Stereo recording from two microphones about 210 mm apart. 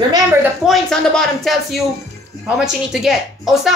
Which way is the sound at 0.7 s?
5° left (ahead or behind).